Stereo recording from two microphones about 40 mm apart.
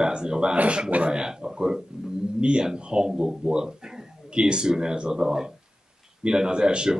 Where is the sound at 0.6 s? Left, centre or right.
Right.